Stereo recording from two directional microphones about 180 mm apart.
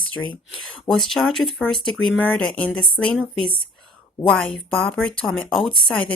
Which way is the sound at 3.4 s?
30° left (ahead or behind).